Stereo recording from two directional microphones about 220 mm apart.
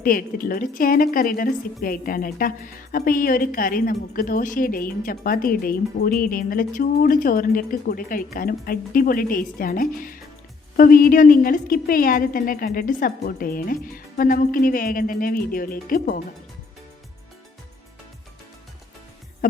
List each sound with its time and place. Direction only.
0.0 s a woman's voice: 40° left (ahead or behind)